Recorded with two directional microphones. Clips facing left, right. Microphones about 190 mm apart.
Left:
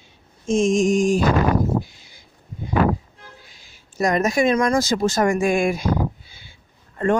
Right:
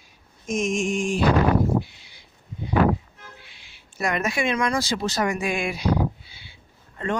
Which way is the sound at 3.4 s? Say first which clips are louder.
Left 2 dB; 40° left (ahead or behind).